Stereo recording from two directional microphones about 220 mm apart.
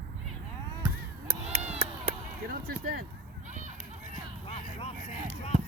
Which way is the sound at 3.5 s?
35° right (ahead or behind).